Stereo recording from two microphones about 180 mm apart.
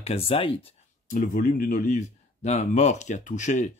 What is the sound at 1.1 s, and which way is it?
Speech, 50° left (ahead or behind).